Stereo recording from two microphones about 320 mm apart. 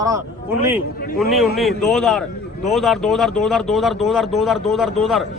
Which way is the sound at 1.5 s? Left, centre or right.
Centre.